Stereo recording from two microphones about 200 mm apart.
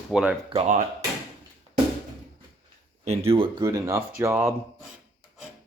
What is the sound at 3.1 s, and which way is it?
Speech, 30° right (ahead or behind).